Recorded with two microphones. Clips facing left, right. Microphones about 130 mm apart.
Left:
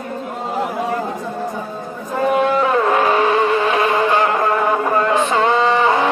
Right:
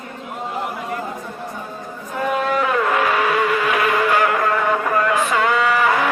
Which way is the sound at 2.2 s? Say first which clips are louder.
Left 4 dB; 25° left (ahead or behind).